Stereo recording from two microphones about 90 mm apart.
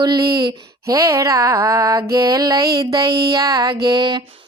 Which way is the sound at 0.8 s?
40° right (ahead or behind).